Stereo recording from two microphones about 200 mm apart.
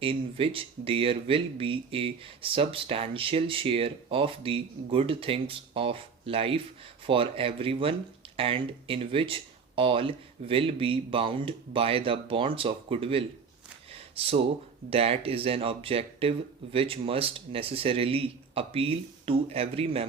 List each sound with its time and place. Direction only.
0.0 s speech: 25° right (ahead or behind)
14.8 s speech: 30° right (ahead or behind)